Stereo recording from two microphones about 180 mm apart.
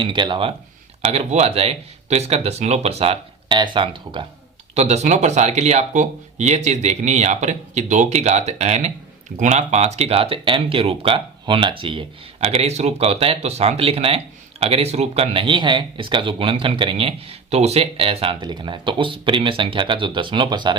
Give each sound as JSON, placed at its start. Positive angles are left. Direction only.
{"t": 0.0, "sound": "speech", "side_deg": -25}
{"t": 4.7, "sound": "speech", "side_deg": -40}